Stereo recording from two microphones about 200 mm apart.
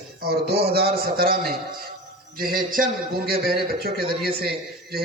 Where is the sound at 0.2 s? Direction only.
50° right (ahead or behind).